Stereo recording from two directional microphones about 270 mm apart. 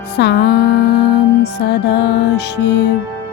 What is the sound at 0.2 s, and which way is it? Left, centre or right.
Music, left.